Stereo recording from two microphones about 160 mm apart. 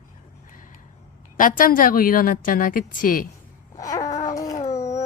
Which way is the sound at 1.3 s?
60° left (ahead or behind).